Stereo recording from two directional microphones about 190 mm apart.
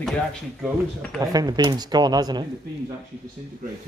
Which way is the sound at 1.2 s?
20° right (ahead or behind).